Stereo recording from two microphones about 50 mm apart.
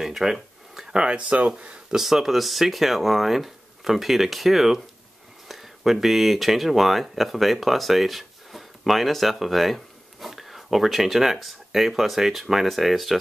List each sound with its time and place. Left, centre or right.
0.0 s a sound: centre
0.9 s speech: centre
2.0 s speech: centre